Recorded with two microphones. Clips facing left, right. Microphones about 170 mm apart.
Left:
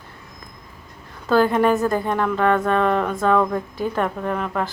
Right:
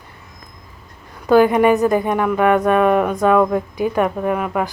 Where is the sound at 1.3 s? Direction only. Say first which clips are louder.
Right 5 dB; 15° right (ahead or behind).